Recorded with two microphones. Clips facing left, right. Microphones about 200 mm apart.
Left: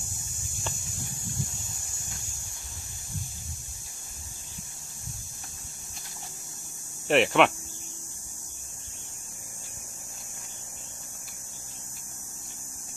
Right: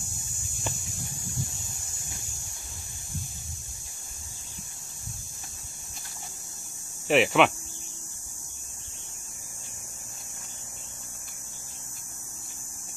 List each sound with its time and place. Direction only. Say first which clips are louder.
7.1 s hum: even; centre (ahead or behind)